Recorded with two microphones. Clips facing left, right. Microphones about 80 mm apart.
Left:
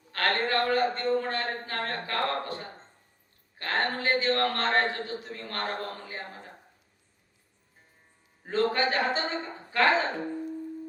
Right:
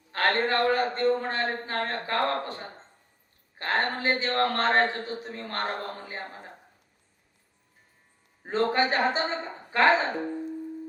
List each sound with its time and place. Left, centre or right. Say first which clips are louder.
0.1 s a man's voice: right 2 dB; right
8.4 s a man's voice: right 1 dB; right